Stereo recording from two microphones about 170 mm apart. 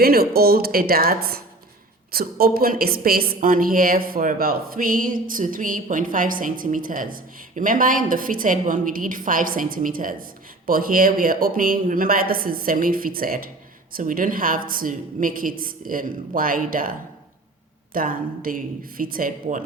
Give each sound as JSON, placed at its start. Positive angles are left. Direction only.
{"t": 0.0, "sound": "a woman's voice", "side_deg": -65}
{"t": 17.9, "sound": "a woman's voice", "side_deg": -55}